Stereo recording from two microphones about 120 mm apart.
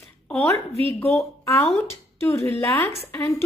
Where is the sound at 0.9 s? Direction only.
20° left (ahead or behind).